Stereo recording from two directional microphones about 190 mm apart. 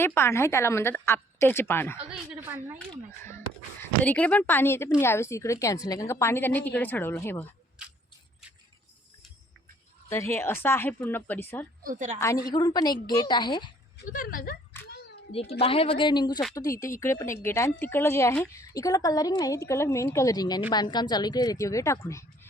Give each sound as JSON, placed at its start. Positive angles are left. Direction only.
{"t": 0.0, "sound": "a woman's voice", "side_deg": 10}
{"t": 2.0, "sound": "a woman's voice", "side_deg": -10}
{"t": 3.1, "sound": "a woman's voice", "side_deg": 15}
{"t": 10.1, "sound": "a woman's voice", "side_deg": 15}
{"t": 11.8, "sound": "a woman's voice", "side_deg": -45}
{"t": 12.2, "sound": "speech", "side_deg": 15}
{"t": 14.1, "sound": "speech", "side_deg": 45}
{"t": 14.7, "sound": "a sound", "side_deg": 10}
{"t": 15.3, "sound": "a woman's voice", "side_deg": 30}